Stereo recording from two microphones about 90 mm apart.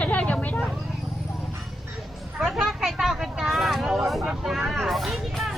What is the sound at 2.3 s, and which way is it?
Vehicle, 5° right (ahead or behind).